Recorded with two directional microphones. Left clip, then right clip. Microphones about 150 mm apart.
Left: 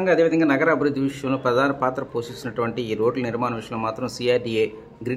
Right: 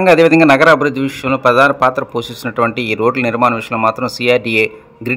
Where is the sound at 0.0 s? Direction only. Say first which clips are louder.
Right 10 dB; 65° right (ahead or behind).